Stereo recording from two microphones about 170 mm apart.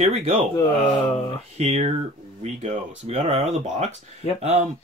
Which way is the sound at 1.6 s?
40° right (ahead or behind).